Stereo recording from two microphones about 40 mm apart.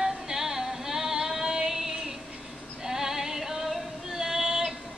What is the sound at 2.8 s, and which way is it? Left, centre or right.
Female singing, centre.